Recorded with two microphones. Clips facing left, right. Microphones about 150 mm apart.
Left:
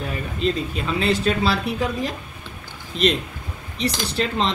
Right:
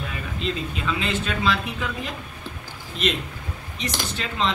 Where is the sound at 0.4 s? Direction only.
40° left (ahead or behind).